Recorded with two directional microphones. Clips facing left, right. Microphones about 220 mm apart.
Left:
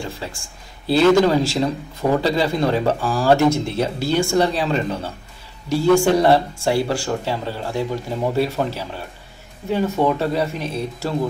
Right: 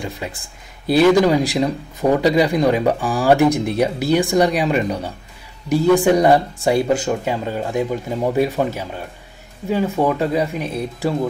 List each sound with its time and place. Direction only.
0.0 s speech: 20° right (ahead or behind)